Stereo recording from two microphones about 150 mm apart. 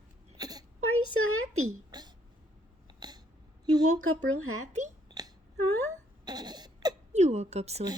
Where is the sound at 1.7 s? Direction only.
30° right (ahead or behind).